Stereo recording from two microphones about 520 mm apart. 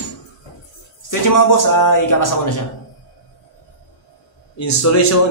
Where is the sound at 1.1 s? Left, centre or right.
Left.